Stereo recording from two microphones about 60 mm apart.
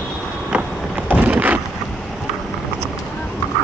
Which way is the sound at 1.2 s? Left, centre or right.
Right.